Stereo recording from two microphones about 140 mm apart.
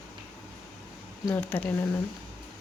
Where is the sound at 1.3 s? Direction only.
15° left (ahead or behind).